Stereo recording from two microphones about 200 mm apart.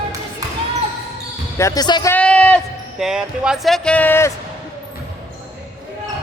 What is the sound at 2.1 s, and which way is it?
A man's voice, 5° left (ahead or behind).